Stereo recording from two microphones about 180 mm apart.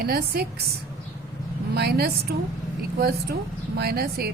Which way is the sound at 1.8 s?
60° right (ahead or behind).